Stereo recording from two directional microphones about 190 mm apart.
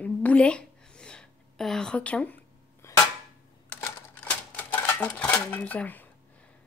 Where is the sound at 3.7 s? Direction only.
10° left (ahead or behind).